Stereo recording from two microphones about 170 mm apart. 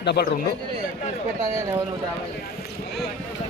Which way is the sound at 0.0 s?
75° left (ahead or behind).